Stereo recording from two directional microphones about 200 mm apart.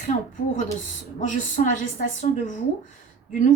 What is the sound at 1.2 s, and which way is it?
A woman's voice, 40° left (ahead or behind).